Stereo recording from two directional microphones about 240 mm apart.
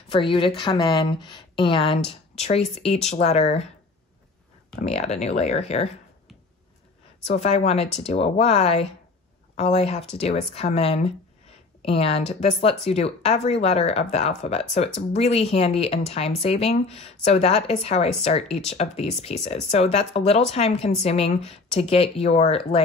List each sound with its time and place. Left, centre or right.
0.1 s speech: left
4.7 s speech: left
7.2 s speech: left